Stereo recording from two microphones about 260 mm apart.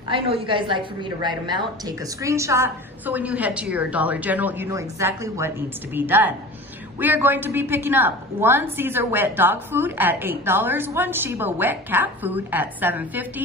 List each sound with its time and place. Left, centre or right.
0.1 s a woman's voice: centre